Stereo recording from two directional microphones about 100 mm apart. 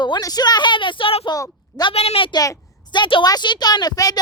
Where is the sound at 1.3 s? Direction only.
40° left (ahead or behind).